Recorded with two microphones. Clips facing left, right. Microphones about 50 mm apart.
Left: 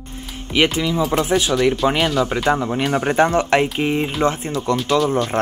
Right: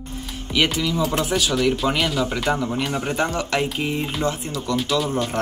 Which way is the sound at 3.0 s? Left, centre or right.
Left.